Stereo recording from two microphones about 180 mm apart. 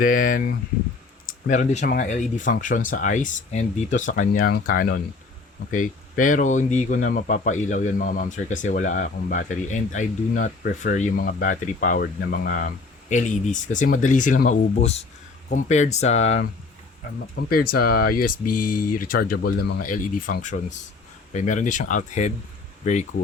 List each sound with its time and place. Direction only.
0.0 s speech: 50° left (ahead or behind)
17.5 s speech: 60° left (ahead or behind)
20.0 s speech: 50° left (ahead or behind)